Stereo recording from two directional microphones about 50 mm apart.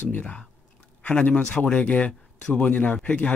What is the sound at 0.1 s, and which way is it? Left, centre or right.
Speech, left.